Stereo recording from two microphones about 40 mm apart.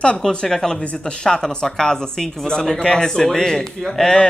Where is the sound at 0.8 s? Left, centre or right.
Left.